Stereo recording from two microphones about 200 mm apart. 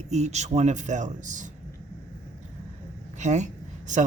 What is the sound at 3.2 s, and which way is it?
Speech, 35° right (ahead or behind).